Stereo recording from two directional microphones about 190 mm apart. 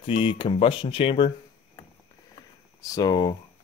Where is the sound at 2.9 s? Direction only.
20° left (ahead or behind).